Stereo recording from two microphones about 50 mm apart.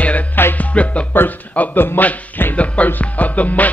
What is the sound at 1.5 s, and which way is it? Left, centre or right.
Speech, left.